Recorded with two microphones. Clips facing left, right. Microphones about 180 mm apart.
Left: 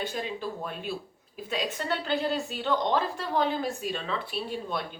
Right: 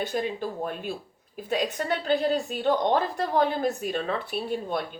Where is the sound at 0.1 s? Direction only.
50° right (ahead or behind).